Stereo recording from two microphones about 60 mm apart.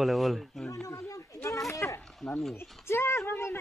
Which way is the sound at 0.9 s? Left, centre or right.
Left.